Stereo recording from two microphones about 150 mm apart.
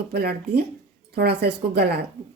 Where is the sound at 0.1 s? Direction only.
90° right.